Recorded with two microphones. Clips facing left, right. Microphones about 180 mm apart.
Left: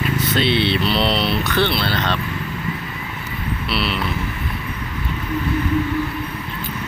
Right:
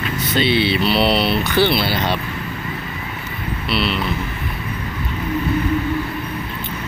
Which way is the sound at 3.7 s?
Centre (ahead or behind).